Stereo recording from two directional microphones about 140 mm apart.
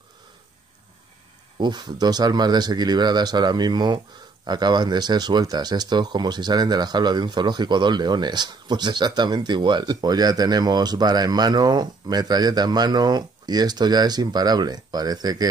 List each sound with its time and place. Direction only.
1.6 s speech: 30° right (ahead or behind)